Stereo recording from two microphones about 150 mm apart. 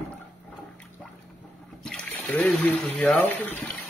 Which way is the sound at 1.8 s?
5° left (ahead or behind).